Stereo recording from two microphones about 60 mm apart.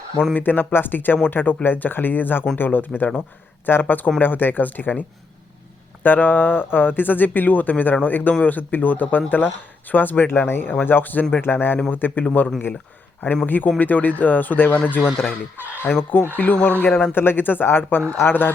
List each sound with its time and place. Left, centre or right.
0.3 s speech: left
13.2 s speech: left